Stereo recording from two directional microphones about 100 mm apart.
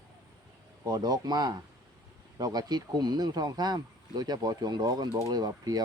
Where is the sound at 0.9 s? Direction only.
40° right (ahead or behind).